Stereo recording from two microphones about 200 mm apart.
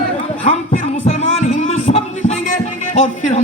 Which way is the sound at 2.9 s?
35° left (ahead or behind).